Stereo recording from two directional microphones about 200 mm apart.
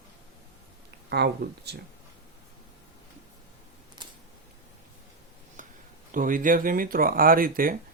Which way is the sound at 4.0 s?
20° right (ahead or behind).